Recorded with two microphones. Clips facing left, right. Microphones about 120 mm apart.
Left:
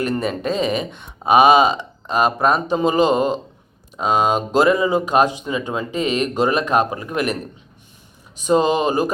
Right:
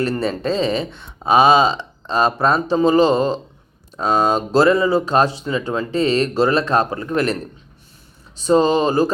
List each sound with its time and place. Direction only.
0.1 s speech: 15° left (ahead or behind)
8.4 s speech: 15° left (ahead or behind)